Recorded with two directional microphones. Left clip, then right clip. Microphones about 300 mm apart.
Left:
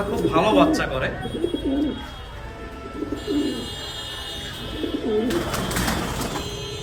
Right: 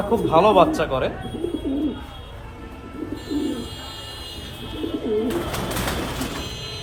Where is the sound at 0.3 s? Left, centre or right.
Centre.